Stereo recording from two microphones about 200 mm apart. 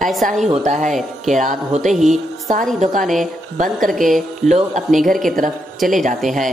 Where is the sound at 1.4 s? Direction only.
40° right (ahead or behind).